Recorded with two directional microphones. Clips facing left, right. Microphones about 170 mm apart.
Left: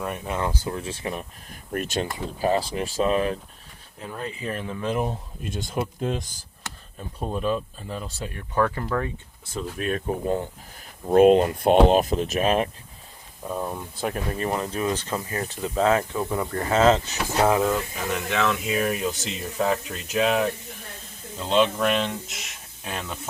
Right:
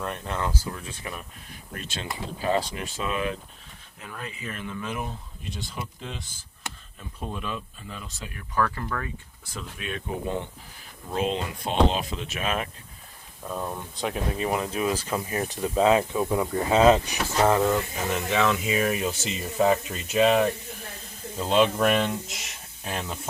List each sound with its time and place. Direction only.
0.0 s speech: 5° left (ahead or behind); by 1.3 s 30° left (ahead or behind)
1.7 s speech: 55° left (ahead or behind)
2.7 s speech: 35° left (ahead or behind)
5.4 s speech: 50° left (ahead or behind); by 9.0 s 25° left (ahead or behind)
9.7 s speech: 45° left (ahead or behind)
13.4 s speech: 10° left (ahead or behind); by 17.2 s 15° right (ahead or behind)
17.4 s speech: 5° left (ahead or behind)